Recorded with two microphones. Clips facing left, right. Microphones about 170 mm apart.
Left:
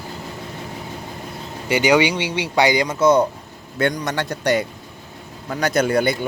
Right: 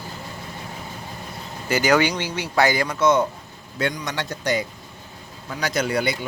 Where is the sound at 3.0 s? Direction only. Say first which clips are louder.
Left 3 dB; 35° left (ahead or behind).